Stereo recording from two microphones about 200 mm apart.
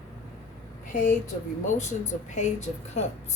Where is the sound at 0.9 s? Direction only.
40° left (ahead or behind).